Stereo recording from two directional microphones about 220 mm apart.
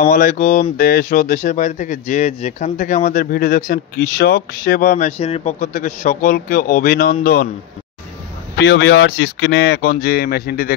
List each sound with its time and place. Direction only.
0.0 s speech: 35° left (ahead or behind)
8.5 s speech: 50° left (ahead or behind)